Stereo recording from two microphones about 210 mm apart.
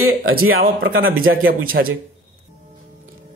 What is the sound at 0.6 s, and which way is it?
A man's voice, 45° right (ahead or behind).